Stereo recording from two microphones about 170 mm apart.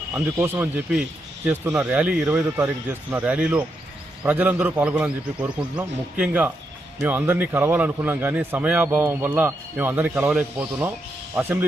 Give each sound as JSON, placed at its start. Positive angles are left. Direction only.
{"t": 0.1, "sound": "a man's voice", "side_deg": -10}